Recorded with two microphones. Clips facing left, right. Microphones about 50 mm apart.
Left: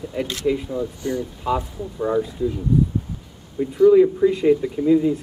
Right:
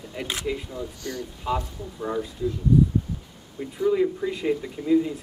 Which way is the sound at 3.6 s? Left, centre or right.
Centre.